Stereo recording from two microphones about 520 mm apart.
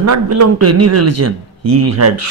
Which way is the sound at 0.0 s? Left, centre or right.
Right.